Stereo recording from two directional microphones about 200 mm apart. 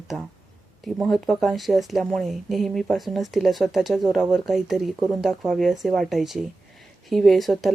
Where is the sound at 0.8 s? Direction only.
Centre (ahead or behind).